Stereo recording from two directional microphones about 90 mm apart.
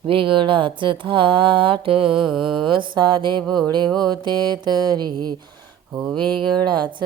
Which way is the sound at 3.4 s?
5° left (ahead or behind).